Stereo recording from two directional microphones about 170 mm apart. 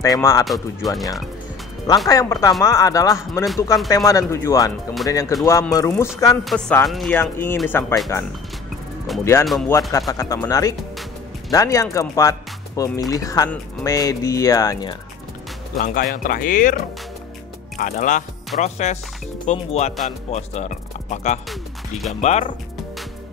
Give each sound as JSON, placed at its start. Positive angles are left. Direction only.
{"t": 0.0, "sound": "speech", "side_deg": 20}
{"t": 0.5, "sound": "speech", "side_deg": 0}
{"t": 2.0, "sound": "speech", "side_deg": 20}
{"t": 6.4, "sound": "speech", "side_deg": 5}
{"t": 7.2, "sound": "speech", "side_deg": 15}
{"t": 15.8, "sound": "speech", "side_deg": 55}
{"t": 21.5, "sound": "speech", "side_deg": 0}
{"t": 22.2, "sound": "speech", "side_deg": 40}